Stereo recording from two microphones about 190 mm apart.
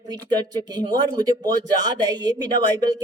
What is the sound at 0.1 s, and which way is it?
Speech, 20° right (ahead or behind).